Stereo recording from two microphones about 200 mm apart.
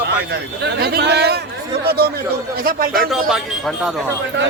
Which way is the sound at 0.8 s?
55° right (ahead or behind).